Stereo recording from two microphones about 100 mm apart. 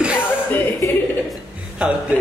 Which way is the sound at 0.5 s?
20° left (ahead or behind).